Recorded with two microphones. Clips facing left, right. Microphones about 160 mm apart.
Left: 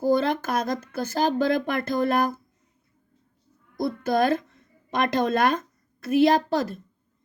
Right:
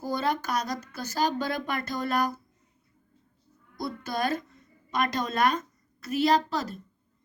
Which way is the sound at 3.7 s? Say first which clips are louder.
Left 8 dB; 55° left (ahead or behind).